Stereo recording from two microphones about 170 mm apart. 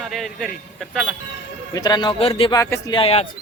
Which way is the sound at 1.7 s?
25° left (ahead or behind).